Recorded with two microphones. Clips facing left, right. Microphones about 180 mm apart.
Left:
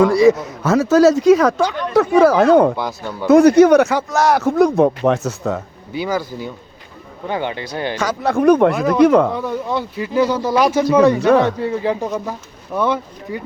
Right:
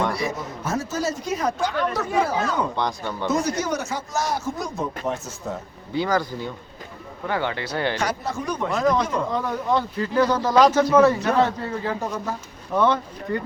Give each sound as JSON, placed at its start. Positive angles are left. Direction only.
{"t": 0.0, "sound": "a man's voice", "side_deg": 90}
{"t": 1.9, "sound": "speech", "side_deg": 70}
{"t": 2.7, "sound": "speech", "side_deg": 5}
{"t": 3.2, "sound": "speech", "side_deg": 60}
{"t": 5.9, "sound": "speech", "side_deg": 10}
{"t": 8.0, "sound": "speech", "side_deg": 65}
{"t": 8.7, "sound": "speech", "side_deg": 10}
{"t": 9.0, "sound": "speech", "side_deg": 65}
{"t": 9.7, "sound": "speech", "side_deg": 10}
{"t": 11.3, "sound": "speech", "side_deg": 70}
{"t": 11.6, "sound": "speech", "side_deg": 15}